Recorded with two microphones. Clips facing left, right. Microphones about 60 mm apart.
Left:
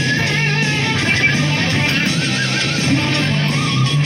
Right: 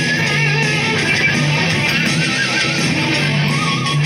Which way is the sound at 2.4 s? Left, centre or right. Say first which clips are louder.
Right 1 dB; right.